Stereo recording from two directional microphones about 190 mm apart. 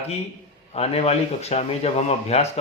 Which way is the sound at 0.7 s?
35° left (ahead or behind).